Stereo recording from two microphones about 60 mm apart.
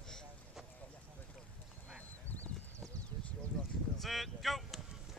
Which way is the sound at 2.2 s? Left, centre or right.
Left.